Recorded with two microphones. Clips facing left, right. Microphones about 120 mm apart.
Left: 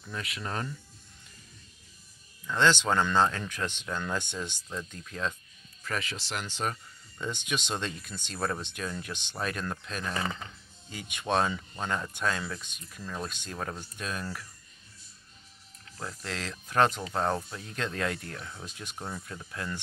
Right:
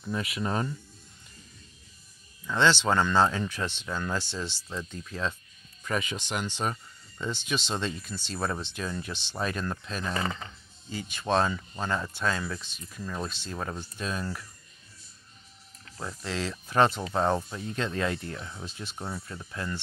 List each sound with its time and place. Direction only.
0.0 s speech: 20° right (ahead or behind)
2.4 s speech: 5° right (ahead or behind)
16.0 s speech: 5° right (ahead or behind)